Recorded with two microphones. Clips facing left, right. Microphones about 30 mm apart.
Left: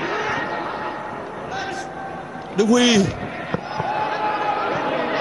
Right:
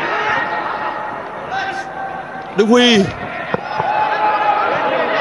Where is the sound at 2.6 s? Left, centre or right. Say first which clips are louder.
Right 5 dB; right.